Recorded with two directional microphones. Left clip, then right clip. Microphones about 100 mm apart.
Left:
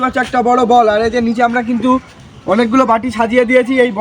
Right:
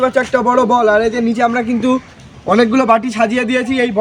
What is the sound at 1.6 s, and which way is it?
A man's voice, 90° right.